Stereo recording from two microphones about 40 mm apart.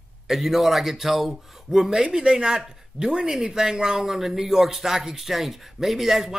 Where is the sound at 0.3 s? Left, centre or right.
Centre.